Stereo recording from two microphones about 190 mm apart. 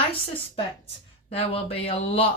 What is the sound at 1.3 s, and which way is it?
Speech, 30° left (ahead or behind).